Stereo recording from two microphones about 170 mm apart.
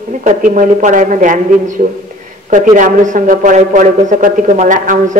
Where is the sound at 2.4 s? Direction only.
50° right (ahead or behind).